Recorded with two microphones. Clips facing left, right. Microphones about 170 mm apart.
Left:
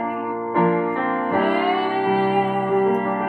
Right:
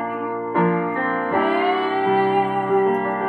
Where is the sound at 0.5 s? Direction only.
25° left (ahead or behind).